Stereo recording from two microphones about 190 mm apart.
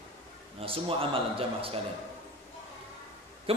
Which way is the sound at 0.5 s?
30° right (ahead or behind).